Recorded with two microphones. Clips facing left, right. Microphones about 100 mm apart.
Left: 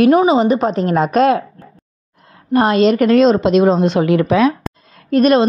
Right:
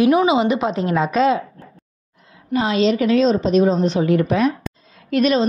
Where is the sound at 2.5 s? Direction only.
50° left (ahead or behind); by 4.7 s 90° left.